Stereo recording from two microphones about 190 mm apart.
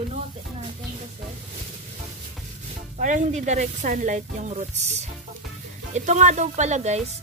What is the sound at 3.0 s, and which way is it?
A woman's voice, 40° right (ahead or behind).